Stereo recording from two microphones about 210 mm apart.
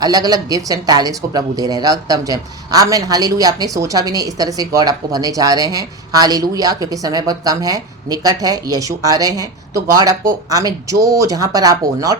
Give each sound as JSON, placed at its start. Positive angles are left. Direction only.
{"t": 0.0, "sound": "speech", "side_deg": -20}